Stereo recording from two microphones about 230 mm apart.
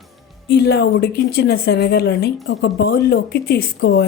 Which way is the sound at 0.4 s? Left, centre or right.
Left.